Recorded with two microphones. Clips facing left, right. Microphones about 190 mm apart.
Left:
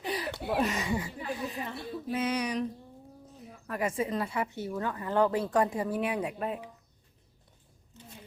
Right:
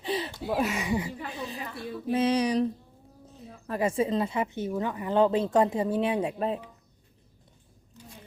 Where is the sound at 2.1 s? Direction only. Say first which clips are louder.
Right 6 dB; 30° right (ahead or behind).